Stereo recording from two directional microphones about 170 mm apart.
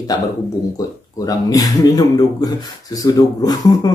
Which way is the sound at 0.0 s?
20° left (ahead or behind).